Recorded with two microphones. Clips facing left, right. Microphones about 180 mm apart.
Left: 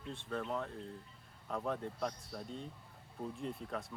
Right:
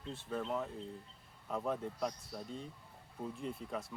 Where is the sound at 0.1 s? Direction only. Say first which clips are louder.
Right 1 dB; 5° right (ahead or behind).